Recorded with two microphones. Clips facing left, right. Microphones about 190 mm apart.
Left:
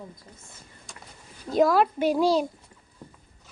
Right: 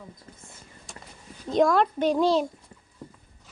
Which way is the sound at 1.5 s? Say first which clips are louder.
Even; 5° left (ahead or behind).